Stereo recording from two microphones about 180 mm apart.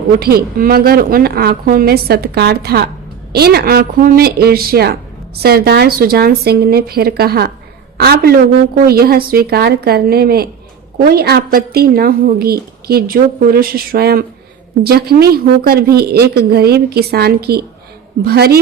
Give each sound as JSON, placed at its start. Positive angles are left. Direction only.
{"t": 0.1, "sound": "speech", "side_deg": -60}